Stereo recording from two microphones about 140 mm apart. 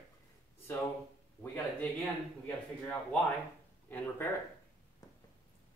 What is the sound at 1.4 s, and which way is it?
Speech, 15° left (ahead or behind).